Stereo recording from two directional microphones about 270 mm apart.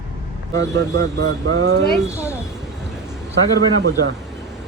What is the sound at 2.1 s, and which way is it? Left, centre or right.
Speech, centre.